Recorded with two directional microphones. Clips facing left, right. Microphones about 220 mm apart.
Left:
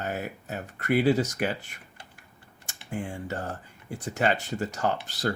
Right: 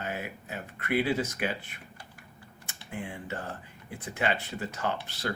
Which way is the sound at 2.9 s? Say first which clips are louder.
Left 4 dB; 45° left (ahead or behind).